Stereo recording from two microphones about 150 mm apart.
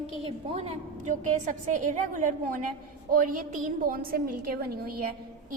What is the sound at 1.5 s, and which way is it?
A woman's voice, 55° right (ahead or behind).